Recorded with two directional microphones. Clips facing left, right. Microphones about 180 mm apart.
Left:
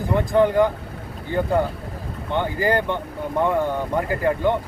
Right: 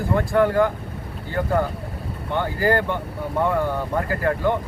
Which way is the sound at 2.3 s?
20° left (ahead or behind).